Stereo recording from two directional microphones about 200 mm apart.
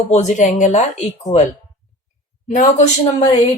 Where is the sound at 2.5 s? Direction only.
40° left (ahead or behind).